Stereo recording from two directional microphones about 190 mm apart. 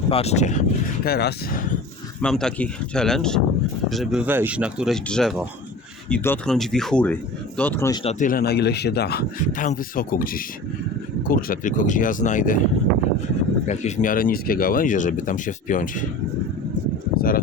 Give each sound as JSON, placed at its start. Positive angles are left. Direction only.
{"t": 0.1, "sound": "speech", "side_deg": 30}
{"t": 1.0, "sound": "speech", "side_deg": 55}
{"t": 2.2, "sound": "speech", "side_deg": 5}
{"t": 8.0, "sound": "speech", "side_deg": 45}
{"t": 13.7, "sound": "speech", "side_deg": 35}
{"t": 17.2, "sound": "speech", "side_deg": 50}